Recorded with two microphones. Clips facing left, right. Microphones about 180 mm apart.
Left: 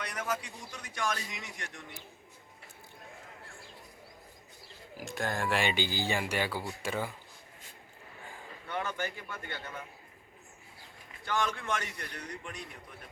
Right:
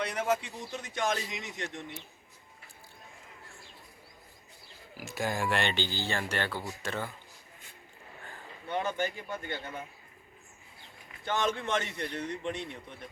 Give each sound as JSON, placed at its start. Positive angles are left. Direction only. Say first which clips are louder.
{"t": 0.0, "sound": "speech", "louder": "right 6 dB", "side_deg": -25}
{"t": 4.9, "sound": "speech", "louder": "right 1 dB", "side_deg": -5}
{"t": 8.6, "sound": "speech", "louder": "right 4 dB", "side_deg": -25}
{"t": 11.3, "sound": "speech", "louder": "right 2 dB", "side_deg": -25}